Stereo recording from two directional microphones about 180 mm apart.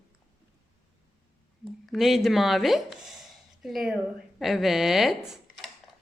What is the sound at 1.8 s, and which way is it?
Speech, centre (ahead or behind).